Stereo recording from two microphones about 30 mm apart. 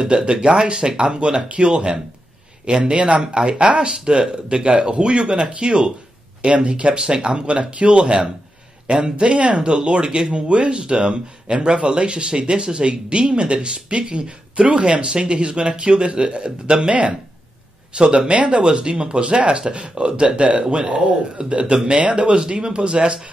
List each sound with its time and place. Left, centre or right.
0.0 s speech: right
6.9 s speech: right
15.0 s speech: right
15.3 s speech: right
17.9 s speech: right